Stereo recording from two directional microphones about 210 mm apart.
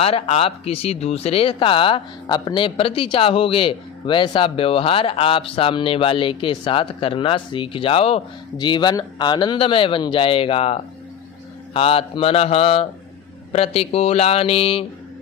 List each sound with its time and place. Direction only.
0.0 s speech: 25° left (ahead or behind)